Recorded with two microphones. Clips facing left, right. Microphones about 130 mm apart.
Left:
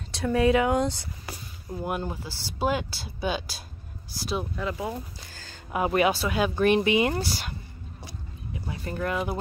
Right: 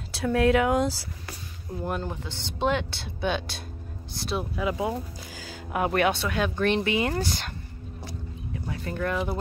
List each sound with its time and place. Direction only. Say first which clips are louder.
0.1 s speech: even; centre (ahead or behind)
4.6 s speech: right 3 dB; 15° right (ahead or behind); by 7.2 s 20° left (ahead or behind)
7.2 s speech: right 1 dB; 5° left (ahead or behind)
8.5 s speech: right 1 dB; 5° left (ahead or behind)